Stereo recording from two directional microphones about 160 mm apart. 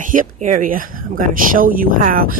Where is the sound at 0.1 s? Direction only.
55° right (ahead or behind).